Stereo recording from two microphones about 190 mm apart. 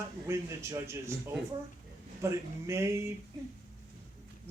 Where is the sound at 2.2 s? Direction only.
15° right (ahead or behind).